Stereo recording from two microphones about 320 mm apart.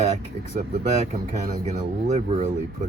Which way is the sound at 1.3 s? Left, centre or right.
Right.